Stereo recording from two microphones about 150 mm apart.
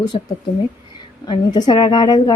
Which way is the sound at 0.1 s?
40° left (ahead or behind).